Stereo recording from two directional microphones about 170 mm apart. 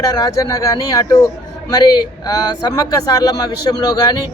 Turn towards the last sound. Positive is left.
turn(degrees=25)  # may be behind; listen again after turning